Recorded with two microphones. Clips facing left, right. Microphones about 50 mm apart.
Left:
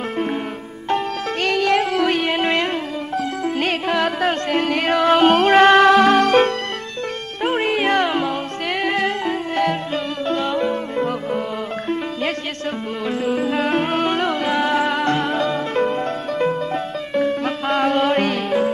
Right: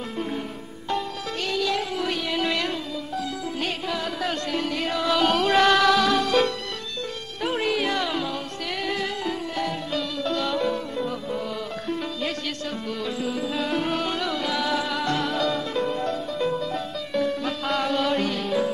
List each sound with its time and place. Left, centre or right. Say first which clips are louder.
0.8 s music: left 7 dB; left
3.4 s music: left 8 dB; left
7.4 s music: left 6 dB; left
9.9 s music: left 4 dB; left
11.0 s music: left 7 dB; left
13.2 s music: left 9 dB; left